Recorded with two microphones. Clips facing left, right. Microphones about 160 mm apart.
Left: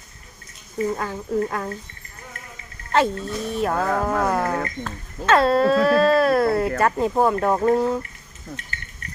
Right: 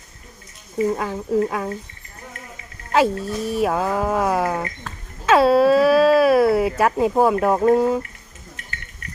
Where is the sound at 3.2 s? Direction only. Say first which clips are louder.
Right 3 dB; 5° right (ahead or behind).